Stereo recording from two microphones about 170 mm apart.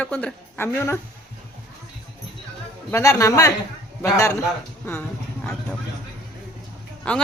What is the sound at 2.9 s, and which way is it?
A woman's voice, 15° left (ahead or behind).